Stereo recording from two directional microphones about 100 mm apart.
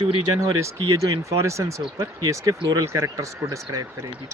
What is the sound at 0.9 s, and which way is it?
Speech, 30° right (ahead or behind).